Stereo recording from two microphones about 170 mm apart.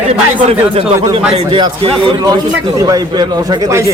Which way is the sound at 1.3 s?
35° right (ahead or behind).